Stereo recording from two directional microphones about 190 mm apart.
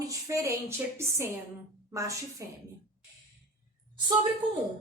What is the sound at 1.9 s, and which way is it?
Speech, 15° right (ahead or behind).